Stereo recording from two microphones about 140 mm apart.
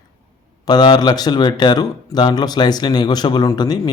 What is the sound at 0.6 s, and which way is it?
Speech, 30° left (ahead or behind).